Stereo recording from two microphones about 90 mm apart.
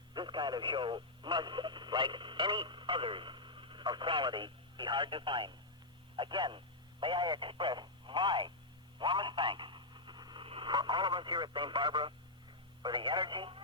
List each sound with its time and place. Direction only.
0.1 s speech: 55° right (ahead or behind)
9.0 s radio: 60° right (ahead or behind)
10.4 s speech: 75° right (ahead or behind)